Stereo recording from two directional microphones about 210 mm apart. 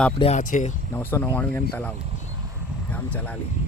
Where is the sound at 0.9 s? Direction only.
10° left (ahead or behind).